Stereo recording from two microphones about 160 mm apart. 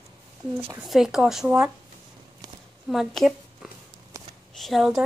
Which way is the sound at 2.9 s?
Centre (ahead or behind).